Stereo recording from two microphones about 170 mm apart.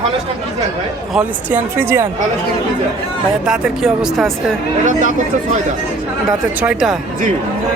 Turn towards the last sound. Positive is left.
turn(degrees=-10)  # may be behind; listen again after turning